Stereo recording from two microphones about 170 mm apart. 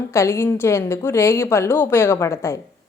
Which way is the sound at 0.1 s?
15° left (ahead or behind).